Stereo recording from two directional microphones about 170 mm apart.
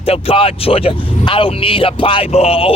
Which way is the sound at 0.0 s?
35° left (ahead or behind).